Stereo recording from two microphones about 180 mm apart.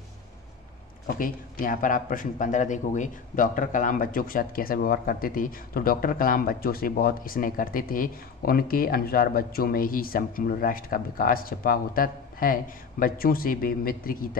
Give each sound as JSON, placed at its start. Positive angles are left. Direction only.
{"t": 1.0, "sound": "a man's voice", "side_deg": 50}